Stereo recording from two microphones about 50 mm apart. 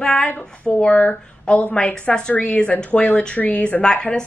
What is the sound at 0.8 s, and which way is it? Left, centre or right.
A woman's voice, left.